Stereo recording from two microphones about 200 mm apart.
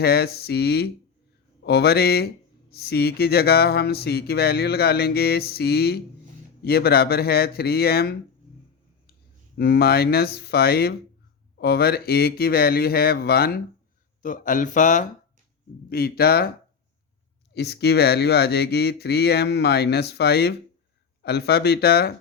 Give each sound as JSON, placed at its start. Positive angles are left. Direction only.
{"t": 0.0, "sound": "speech", "side_deg": 50}
{"t": 9.6, "sound": "speech", "side_deg": 50}
{"t": 15.9, "sound": "speech", "side_deg": 50}
{"t": 17.5, "sound": "speech", "side_deg": 55}